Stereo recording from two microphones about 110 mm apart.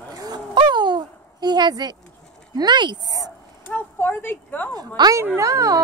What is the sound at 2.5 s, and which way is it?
Speech, 40° right (ahead or behind).